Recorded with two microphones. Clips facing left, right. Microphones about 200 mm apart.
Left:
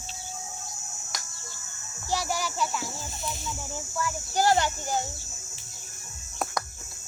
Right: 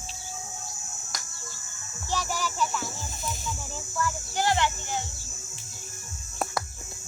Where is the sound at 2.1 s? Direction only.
15° left (ahead or behind).